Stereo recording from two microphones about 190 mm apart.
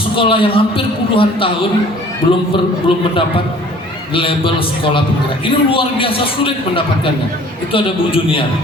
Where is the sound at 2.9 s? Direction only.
25° left (ahead or behind).